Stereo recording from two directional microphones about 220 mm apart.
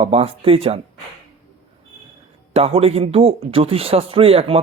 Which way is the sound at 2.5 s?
25° right (ahead or behind).